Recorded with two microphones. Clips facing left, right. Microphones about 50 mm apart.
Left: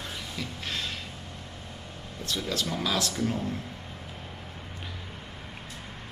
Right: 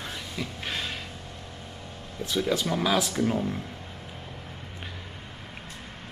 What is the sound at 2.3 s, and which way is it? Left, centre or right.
Speech, centre.